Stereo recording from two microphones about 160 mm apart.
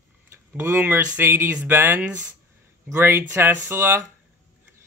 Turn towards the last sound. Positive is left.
turn(degrees=-15)  # may be behind; listen again after turning